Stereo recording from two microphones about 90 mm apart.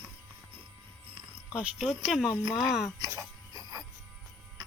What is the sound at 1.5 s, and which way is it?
Speech, 15° right (ahead or behind).